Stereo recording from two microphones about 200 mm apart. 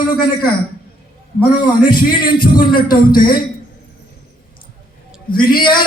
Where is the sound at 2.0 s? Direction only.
45° left (ahead or behind).